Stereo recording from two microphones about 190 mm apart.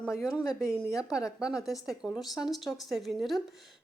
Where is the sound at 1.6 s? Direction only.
Centre (ahead or behind).